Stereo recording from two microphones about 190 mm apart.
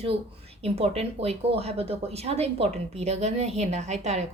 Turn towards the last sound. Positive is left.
turn(degrees=-35)  # may be behind; listen again after turning